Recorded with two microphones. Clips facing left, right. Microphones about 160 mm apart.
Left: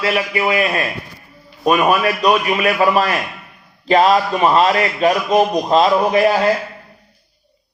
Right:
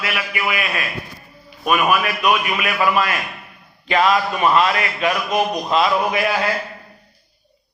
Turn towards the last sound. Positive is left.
turn(degrees=40)  # may be behind; listen again after turning